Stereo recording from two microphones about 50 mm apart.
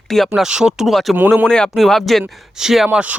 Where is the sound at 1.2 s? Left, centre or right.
Right.